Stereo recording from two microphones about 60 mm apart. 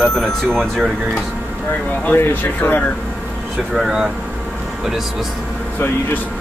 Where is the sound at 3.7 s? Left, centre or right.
Centre.